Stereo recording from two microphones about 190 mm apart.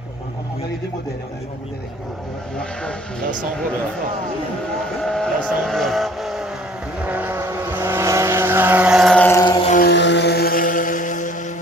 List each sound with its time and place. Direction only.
2.5 s speech: 5° left (ahead or behind)
5.0 s vehicle: centre (ahead or behind)
9.4 s a sound: 20° left (ahead or behind)
9.8 s vehicle: 65° left (ahead or behind); by 11.3 s 40° left (ahead or behind)